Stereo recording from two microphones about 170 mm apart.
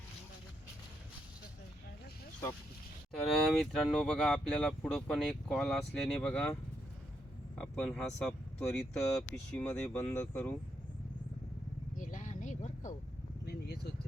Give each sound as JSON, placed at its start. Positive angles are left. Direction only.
{"t": 3.2, "sound": "speech", "side_deg": 0}
{"t": 7.6, "sound": "speech", "side_deg": 5}
{"t": 11.9, "sound": "a sound", "side_deg": 50}
{"t": 13.4, "sound": "vehicle", "side_deg": 70}